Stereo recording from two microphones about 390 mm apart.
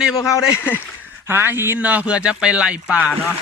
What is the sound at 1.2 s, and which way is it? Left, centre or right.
Speech, centre.